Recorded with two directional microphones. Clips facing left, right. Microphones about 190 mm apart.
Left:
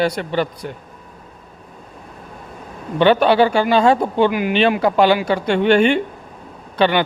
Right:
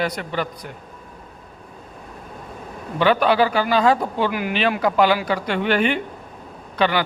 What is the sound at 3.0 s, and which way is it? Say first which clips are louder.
A man's voice: left 4 dB; 30° left (ahead or behind).